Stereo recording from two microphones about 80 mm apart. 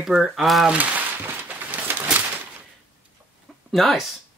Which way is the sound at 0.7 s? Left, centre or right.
Right.